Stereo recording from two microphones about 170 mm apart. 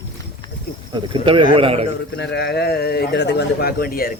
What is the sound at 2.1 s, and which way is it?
A man's voice, 90° left.